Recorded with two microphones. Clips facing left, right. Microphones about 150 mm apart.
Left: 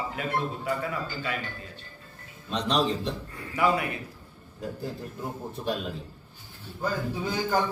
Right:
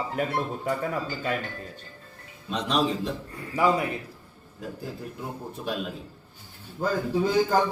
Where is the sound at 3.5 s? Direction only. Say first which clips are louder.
Right 2 dB; 35° right (ahead or behind).